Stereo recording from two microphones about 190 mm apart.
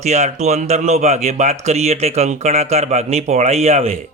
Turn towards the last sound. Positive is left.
turn(degrees=-35)  # may be behind; listen again after turning